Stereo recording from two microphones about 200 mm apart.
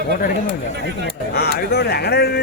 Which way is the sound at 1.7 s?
50° left (ahead or behind).